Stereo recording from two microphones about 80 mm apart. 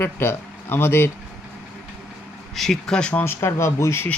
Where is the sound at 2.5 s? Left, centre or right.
Centre.